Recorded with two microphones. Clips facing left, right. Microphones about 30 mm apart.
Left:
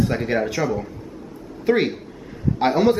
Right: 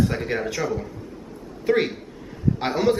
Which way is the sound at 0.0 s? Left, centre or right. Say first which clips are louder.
Left 3 dB; centre.